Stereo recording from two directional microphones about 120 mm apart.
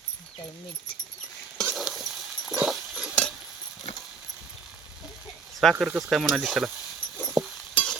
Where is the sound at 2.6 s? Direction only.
5° right (ahead or behind).